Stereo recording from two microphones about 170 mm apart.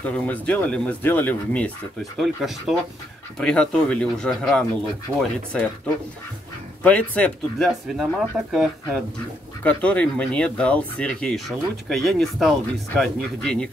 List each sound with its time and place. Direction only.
0.0 s speech: 10° left (ahead or behind)
5.1 s speech: 15° right (ahead or behind)
6.8 s speech: 10° left (ahead or behind)